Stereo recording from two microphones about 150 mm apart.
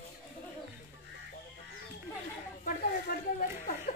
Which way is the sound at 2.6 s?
65° left (ahead or behind).